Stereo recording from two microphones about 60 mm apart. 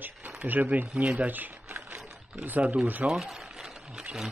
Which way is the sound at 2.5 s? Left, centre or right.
Right.